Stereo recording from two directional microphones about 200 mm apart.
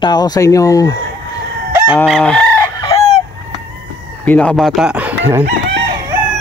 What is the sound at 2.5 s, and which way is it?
Chicken, 20° left (ahead or behind).